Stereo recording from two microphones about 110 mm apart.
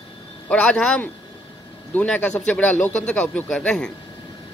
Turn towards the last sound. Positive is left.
turn(degrees=5)  # may be behind; listen again after turning